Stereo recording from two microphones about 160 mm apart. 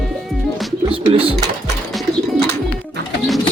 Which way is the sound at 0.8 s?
35° right (ahead or behind).